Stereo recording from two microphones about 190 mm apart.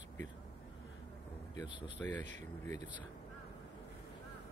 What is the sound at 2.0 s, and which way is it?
Speech, 10° left (ahead or behind).